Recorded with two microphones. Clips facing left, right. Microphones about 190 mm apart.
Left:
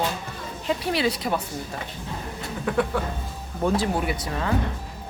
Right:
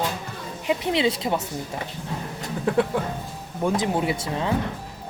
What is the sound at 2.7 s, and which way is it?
Speech, 30° right (ahead or behind).